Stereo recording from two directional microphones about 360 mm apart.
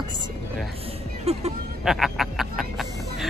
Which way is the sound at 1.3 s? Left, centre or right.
Centre.